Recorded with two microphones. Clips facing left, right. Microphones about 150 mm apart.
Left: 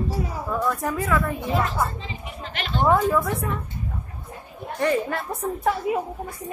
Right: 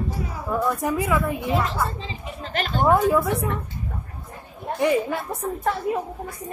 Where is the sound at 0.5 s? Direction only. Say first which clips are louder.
Right 2 dB; 15° right (ahead or behind).